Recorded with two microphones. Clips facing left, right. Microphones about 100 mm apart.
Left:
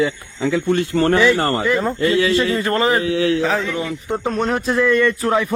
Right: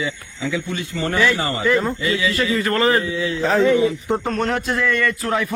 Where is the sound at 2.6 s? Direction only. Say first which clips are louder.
Left 1 dB; 25° left (ahead or behind).